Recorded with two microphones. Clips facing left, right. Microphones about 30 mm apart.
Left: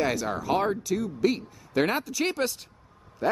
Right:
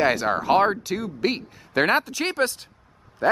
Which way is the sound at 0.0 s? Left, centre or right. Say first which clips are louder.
Right 6 dB; right.